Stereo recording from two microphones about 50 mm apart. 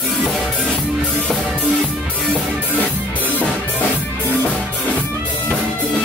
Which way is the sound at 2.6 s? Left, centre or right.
Left.